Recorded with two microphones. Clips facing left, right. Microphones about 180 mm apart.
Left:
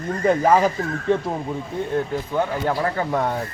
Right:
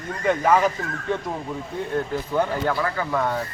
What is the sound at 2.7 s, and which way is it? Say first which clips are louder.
Speech: left 2 dB; 30° left (ahead or behind).